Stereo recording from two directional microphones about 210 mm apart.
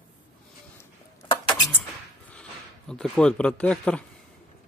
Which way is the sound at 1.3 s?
25° left (ahead or behind).